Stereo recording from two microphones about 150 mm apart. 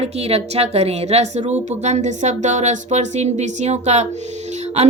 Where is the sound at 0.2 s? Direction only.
45° right (ahead or behind).